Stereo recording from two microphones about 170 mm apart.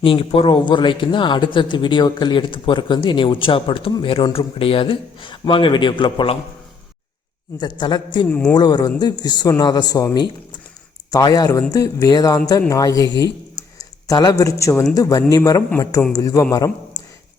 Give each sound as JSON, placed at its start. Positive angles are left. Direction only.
{"t": 0.0, "sound": "speech", "side_deg": 30}
{"t": 7.6, "sound": "speech", "side_deg": 25}
{"t": 8.3, "sound": "speech", "side_deg": 10}
{"t": 8.5, "sound": "speech", "side_deg": 25}
{"t": 11.1, "sound": "speech", "side_deg": 20}